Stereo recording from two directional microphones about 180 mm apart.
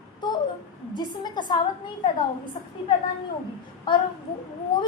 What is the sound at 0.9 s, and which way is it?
Speech, 25° left (ahead or behind).